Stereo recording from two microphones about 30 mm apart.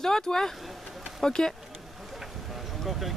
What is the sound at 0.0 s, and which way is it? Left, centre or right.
Speech, centre.